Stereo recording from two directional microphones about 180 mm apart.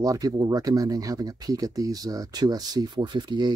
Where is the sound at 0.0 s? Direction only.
20° right (ahead or behind).